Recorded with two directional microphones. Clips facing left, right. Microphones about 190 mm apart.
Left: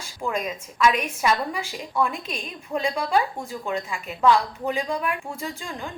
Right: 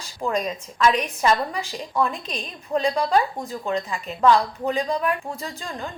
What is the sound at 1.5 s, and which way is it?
A woman's voice, 10° left (ahead or behind).